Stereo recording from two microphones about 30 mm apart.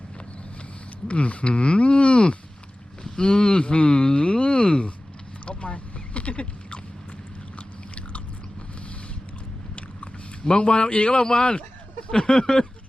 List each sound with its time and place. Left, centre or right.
1.0 s speech: left
3.0 s a sound: left
3.4 s speech: left
5.5 s boat: left
10.4 s speech: left
11.1 s speech: left
12.1 s a sound: left